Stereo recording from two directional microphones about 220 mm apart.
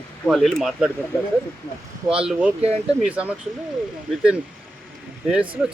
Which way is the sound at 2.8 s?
5° right (ahead or behind).